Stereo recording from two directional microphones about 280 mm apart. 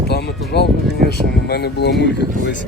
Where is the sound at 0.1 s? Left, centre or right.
Left.